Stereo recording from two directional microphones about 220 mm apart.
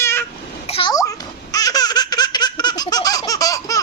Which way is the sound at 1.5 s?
15° left (ahead or behind).